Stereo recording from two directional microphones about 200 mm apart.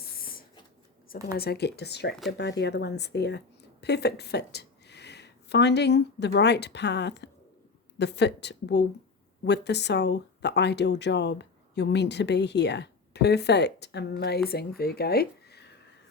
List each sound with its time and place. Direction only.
1.1 s a woman's voice: 50° left (ahead or behind)